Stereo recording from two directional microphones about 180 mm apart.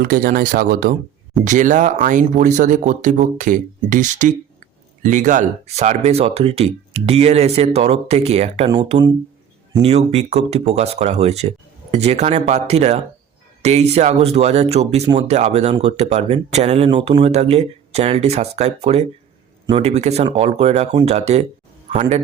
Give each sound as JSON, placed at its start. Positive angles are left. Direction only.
{"t": 0.0, "sound": "speech", "side_deg": -55}
{"t": 9.8, "sound": "a man's voice", "side_deg": -35}